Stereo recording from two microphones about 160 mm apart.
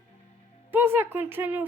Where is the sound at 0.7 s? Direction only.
15° right (ahead or behind).